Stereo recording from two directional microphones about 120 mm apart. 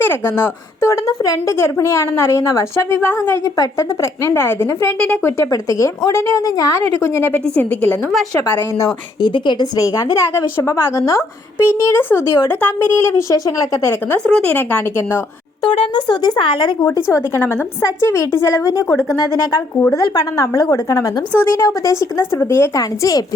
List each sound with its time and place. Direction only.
0.0 s speech: 20° left (ahead or behind)
7.0 s a woman's voice: 15° left (ahead or behind)
9.2 s speech: 40° left (ahead or behind)
14.1 s a woman's voice: 15° left (ahead or behind)
15.6 s speech: 50° left (ahead or behind); by 23.2 s 30° left (ahead or behind)